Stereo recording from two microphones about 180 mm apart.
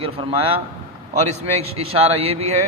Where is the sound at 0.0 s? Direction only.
30° right (ahead or behind).